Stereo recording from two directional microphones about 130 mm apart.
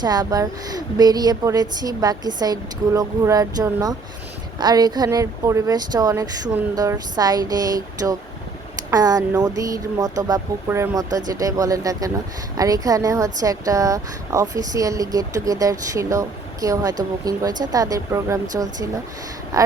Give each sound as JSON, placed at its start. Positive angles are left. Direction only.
{"t": 0.0, "sound": "speech", "side_deg": -30}